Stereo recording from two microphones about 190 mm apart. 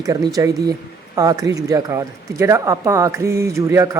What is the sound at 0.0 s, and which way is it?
Speech, 20° right (ahead or behind).